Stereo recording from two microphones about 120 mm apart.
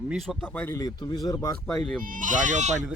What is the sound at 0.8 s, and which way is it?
Speech, 30° left (ahead or behind).